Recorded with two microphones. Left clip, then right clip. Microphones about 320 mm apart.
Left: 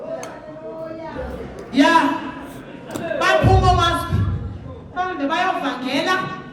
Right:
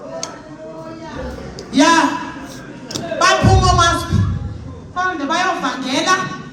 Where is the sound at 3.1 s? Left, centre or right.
Centre.